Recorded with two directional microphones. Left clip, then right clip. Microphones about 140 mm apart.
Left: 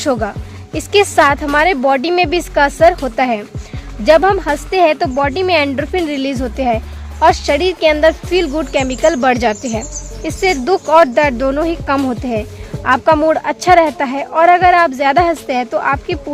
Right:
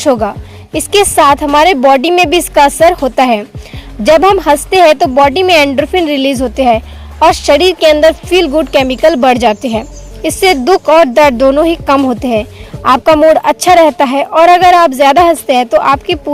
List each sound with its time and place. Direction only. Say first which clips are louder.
0.0 s a woman's voice: right 6 dB; 30° right (ahead or behind)